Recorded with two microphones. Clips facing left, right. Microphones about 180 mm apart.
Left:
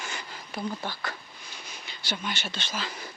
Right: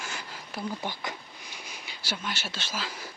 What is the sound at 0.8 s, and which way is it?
Speech, 20° right (ahead or behind).